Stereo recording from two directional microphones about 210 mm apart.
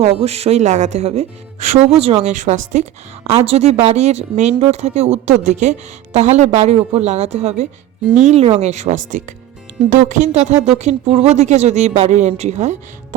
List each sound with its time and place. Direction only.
0.0 s speech: 30° right (ahead or behind)